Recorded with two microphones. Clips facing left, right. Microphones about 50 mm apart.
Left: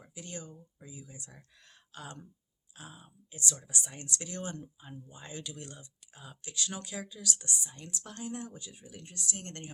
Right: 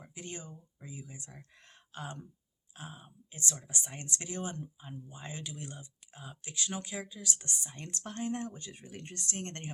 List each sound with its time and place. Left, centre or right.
0.0 s speech: right
4.3 s speech: centre